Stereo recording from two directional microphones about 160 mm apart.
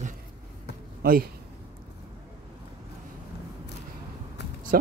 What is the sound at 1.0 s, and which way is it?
Speech, 70° right (ahead or behind).